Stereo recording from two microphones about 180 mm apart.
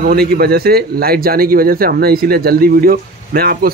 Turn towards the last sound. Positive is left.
turn(degrees=-55)  # may be behind; listen again after turning